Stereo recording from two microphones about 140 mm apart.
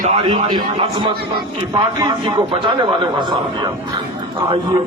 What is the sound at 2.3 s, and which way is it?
A man's voice, 35° right (ahead or behind).